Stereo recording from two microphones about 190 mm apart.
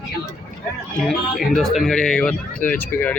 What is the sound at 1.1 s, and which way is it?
Speech, centre (ahead or behind).